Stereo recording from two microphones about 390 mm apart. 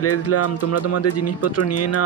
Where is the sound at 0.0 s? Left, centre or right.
Left.